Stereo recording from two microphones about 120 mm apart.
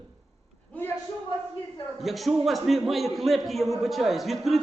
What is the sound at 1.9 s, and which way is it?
A man's voice, centre (ahead or behind).